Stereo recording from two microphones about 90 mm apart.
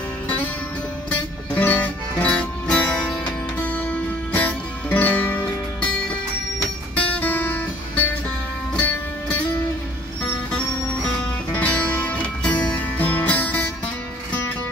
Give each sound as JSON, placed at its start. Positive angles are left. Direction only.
{"t": 1.1, "sound": "music", "side_deg": 15}
{"t": 7.0, "sound": "music", "side_deg": 20}
{"t": 8.7, "sound": "music", "side_deg": 15}
{"t": 11.5, "sound": "music", "side_deg": 15}